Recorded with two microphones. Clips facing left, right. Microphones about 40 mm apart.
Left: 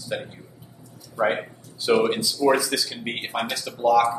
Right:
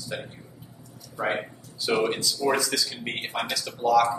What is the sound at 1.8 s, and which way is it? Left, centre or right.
Speech, centre.